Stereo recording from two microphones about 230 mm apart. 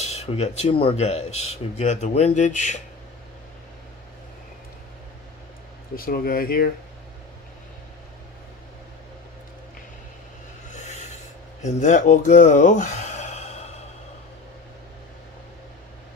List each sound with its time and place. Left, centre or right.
0.0 s speech: left
5.9 s speech: left
10.7 s rub: left
11.6 s speech: left